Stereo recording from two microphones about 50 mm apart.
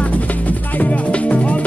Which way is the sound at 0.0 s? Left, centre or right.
Left.